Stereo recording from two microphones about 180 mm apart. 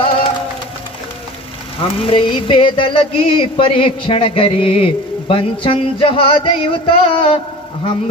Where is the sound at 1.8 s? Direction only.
30° left (ahead or behind).